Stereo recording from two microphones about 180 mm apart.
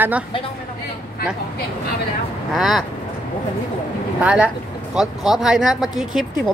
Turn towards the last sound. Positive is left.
turn(degrees=-5)  # may be behind; listen again after turning